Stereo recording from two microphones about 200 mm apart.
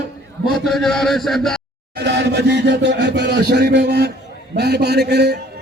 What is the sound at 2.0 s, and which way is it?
A man's voice, 55° right (ahead or behind).